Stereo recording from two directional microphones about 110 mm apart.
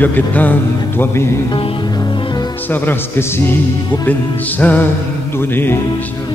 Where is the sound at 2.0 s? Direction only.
40° left (ahead or behind).